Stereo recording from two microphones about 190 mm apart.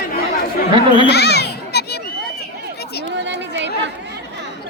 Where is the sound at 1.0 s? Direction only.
60° left (ahead or behind).